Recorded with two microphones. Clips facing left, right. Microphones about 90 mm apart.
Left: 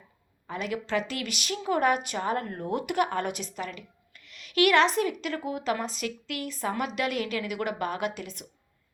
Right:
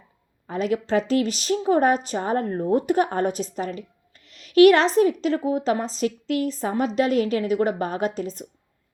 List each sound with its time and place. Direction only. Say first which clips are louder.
0.4 s a woman's voice: right 8 dB; 35° right (ahead or behind)